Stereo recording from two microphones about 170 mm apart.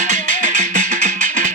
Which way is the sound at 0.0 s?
45° right (ahead or behind).